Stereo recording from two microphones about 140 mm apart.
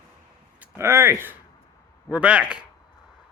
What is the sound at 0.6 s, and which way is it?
Speech, 20° right (ahead or behind).